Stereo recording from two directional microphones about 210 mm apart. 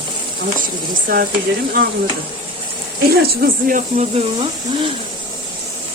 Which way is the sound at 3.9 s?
25° right (ahead or behind).